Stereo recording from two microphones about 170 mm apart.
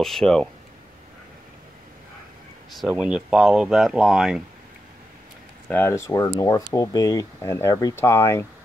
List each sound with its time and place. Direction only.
0.0 s speech: centre (ahead or behind)
2.7 s speech: 5° right (ahead or behind)
5.7 s speech: 15° left (ahead or behind)